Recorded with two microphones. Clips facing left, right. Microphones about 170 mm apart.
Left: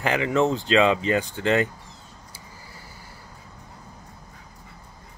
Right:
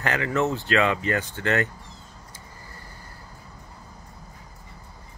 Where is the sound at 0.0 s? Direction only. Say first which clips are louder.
Left 3 dB; 15° left (ahead or behind).